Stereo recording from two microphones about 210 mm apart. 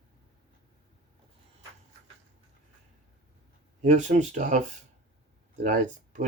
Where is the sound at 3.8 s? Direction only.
35° right (ahead or behind).